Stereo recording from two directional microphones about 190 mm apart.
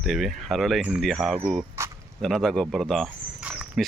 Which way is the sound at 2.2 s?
Centre (ahead or behind).